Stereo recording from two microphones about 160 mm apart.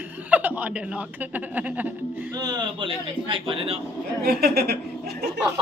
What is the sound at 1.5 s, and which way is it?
Music, 10° right (ahead or behind).